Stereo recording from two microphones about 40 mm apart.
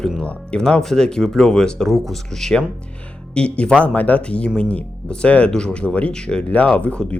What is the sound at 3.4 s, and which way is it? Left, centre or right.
Speech, left.